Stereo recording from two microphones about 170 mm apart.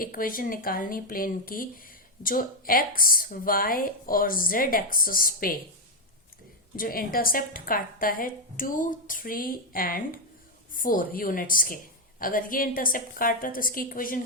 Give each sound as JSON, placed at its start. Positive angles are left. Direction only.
{"t": 0.0, "sound": "a woman's voice", "side_deg": 55}
{"t": 6.7, "sound": "a woman's voice", "side_deg": 55}